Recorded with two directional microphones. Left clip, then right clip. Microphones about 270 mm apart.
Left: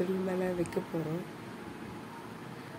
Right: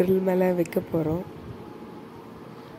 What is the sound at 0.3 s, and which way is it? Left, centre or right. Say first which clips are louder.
Speech: right 10 dB; right.